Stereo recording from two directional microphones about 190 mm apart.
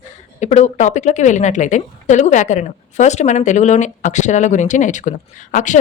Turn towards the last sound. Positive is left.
turn(degrees=40)  # may be behind; listen again after turning